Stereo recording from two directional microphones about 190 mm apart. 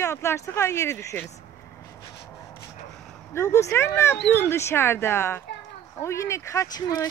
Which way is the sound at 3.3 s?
15° left (ahead or behind).